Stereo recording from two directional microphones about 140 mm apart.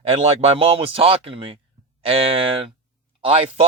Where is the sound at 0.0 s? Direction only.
45° right (ahead or behind).